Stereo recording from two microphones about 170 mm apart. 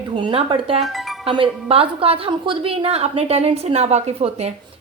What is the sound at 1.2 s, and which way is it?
A woman's voice, 35° right (ahead or behind).